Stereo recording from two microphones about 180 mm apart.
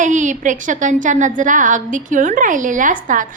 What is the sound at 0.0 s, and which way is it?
A woman's voice, 45° right (ahead or behind).